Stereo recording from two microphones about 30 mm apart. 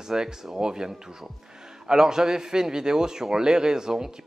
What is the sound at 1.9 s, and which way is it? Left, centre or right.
A man's voice, right.